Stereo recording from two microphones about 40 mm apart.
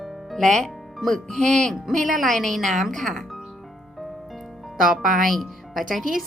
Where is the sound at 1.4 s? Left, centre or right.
Left.